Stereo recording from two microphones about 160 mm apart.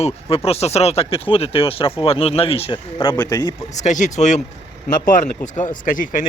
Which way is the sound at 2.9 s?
25° left (ahead or behind).